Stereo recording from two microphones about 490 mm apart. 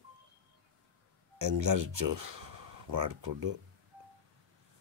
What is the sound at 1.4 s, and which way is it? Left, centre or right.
Speech, right.